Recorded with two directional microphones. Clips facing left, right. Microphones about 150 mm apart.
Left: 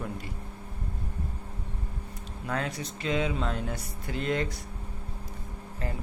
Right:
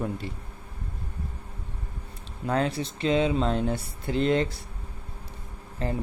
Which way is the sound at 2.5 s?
30° right (ahead or behind).